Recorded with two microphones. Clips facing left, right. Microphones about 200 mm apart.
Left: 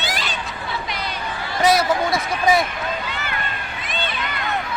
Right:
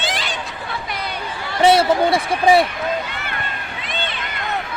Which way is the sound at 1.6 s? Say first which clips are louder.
Right 4 dB; 30° right (ahead or behind).